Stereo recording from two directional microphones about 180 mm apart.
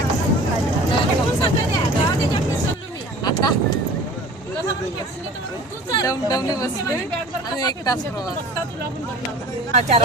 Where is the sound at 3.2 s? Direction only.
20° left (ahead or behind).